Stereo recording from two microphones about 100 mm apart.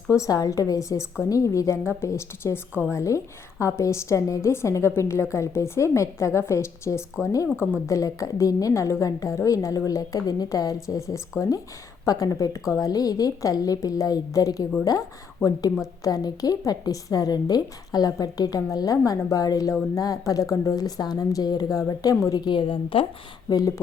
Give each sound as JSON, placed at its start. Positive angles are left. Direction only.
{"t": 0.1, "sound": "a woman's voice", "side_deg": 35}
{"t": 16.0, "sound": "a woman's voice", "side_deg": 40}
{"t": 23.5, "sound": "a woman's voice", "side_deg": 40}